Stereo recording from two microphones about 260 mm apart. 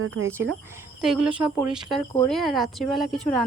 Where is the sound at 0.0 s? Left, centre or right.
Right.